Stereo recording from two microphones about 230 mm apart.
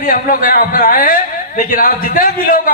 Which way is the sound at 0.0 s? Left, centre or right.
Left.